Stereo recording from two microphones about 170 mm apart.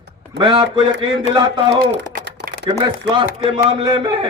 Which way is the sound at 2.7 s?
35° right (ahead or behind).